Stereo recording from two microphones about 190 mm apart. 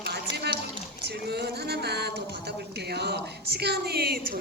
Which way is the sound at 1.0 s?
60° right (ahead or behind).